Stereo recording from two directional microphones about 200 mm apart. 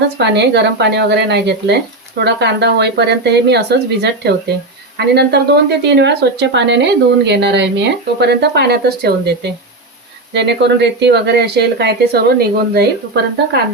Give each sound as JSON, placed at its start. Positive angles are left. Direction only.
{"t": 0.2, "sound": "a woman's voice", "side_deg": -60}